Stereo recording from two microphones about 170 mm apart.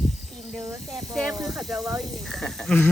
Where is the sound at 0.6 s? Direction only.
20° right (ahead or behind).